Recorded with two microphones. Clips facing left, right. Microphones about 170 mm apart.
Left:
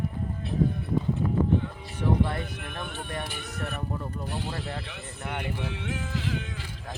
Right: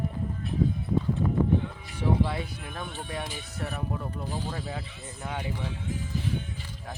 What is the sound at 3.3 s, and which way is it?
Speech, 65° left (ahead or behind).